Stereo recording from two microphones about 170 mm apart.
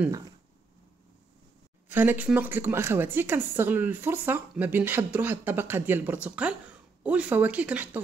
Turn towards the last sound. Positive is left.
turn(degrees=-10)  # may be behind; listen again after turning